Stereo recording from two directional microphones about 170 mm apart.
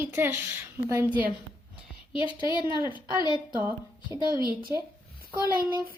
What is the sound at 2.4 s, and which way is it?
Speech, 25° left (ahead or behind).